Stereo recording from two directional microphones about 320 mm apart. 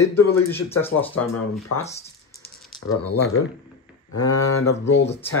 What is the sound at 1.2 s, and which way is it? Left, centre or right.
Speech, left.